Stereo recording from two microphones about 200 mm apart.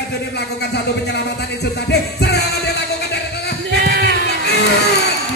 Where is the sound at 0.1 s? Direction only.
55° left (ahead or behind).